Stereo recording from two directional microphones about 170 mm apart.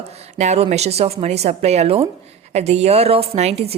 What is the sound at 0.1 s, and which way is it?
A woman's voice, 40° right (ahead or behind).